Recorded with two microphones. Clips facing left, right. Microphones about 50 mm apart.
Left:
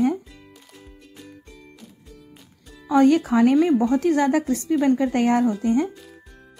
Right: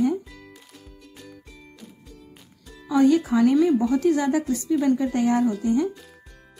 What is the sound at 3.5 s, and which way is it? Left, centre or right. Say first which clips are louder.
A woman's voice: left 1 dB; left.